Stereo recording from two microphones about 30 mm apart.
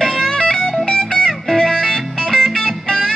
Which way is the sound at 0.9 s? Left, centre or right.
Left.